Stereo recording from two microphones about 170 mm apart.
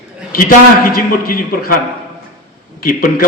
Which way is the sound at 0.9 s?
60° left (ahead or behind).